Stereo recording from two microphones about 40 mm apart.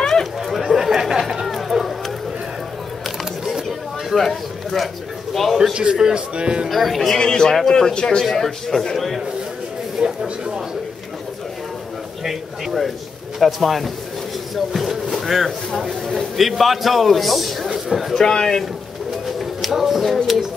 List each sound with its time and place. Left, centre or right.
0.0 s chatter: centre
0.5 s chatter: centre
1.5 s a sound: centre
4.1 s a man's voice: centre
5.6 s speech: right
6.7 s speech: centre
7.2 s a man's voice: centre
8.3 s a man's voice: centre
10.0 s speech: right
12.3 s speech: centre
18.1 s a man's voice: centre
19.2 s a sound: centre